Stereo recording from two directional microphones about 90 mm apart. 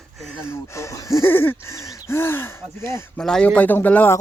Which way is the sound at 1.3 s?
25° left (ahead or behind).